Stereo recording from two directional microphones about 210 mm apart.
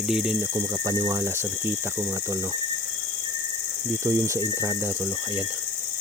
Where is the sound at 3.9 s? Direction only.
15° right (ahead or behind).